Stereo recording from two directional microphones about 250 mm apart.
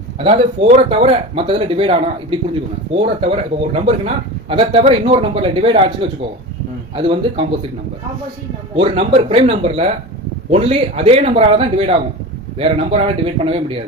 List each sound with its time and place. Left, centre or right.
0.2 s speech: right
8.7 s speech: right